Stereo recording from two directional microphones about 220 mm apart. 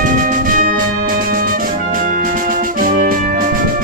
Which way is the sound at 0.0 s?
40° right (ahead or behind).